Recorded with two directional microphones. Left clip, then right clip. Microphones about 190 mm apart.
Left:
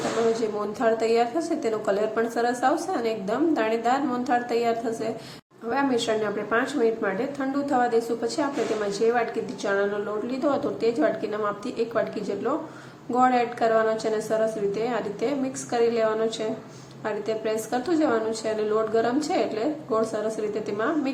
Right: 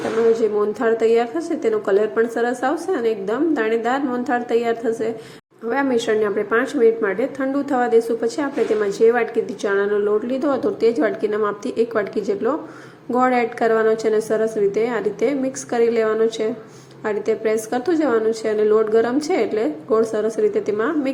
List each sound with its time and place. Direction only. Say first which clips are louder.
0.3 s a woman's voice: right 8 dB; 20° right (ahead or behind)